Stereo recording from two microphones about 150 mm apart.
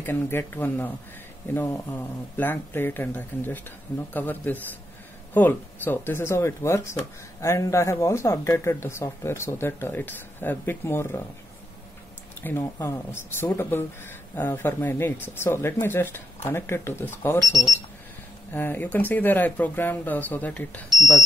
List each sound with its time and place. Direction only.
0.0 s speech: 15° left (ahead or behind)
12.4 s speech: 15° left (ahead or behind)
18.5 s speech: 15° left (ahead or behind)